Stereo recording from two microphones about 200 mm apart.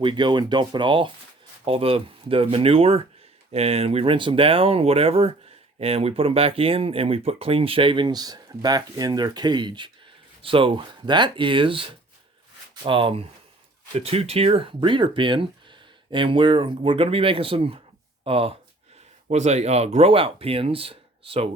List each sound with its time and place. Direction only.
0.0 s speech: 25° right (ahead or behind)